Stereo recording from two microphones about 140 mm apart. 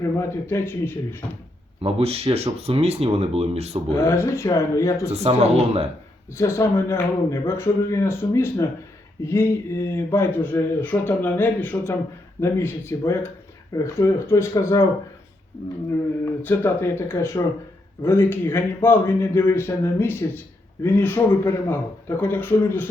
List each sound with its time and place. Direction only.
0.0 s speech: 20° left (ahead or behind)
1.8 s speech: 45° right (ahead or behind)
3.9 s a man's voice: 20° left (ahead or behind)
5.1 s speech: 50° right (ahead or behind)
6.3 s a man's voice: 20° left (ahead or behind)
16.2 s speech: 15° left (ahead or behind)